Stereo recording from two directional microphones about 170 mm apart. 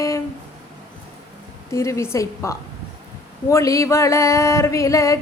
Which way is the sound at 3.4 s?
20° left (ahead or behind).